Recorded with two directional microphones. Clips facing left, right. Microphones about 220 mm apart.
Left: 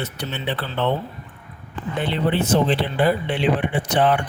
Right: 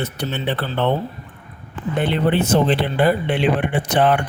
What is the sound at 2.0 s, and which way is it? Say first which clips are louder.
Speech: right 3 dB; 55° right (ahead or behind).